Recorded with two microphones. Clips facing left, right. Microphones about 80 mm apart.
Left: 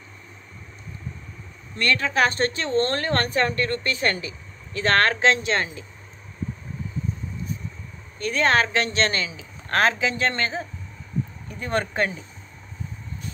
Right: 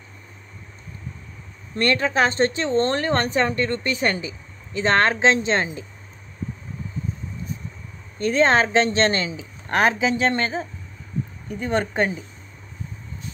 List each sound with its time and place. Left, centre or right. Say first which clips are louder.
1.8 s speech: right 2 dB; right
8.2 s speech: right 3 dB; right